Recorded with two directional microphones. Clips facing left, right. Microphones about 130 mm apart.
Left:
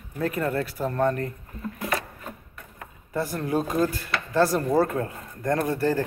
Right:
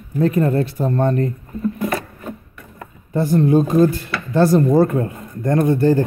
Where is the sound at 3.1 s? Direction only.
20° right (ahead or behind).